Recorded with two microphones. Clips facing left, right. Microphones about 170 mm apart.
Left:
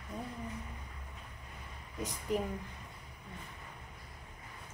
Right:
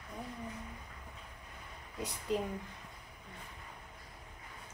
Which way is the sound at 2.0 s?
15° left (ahead or behind).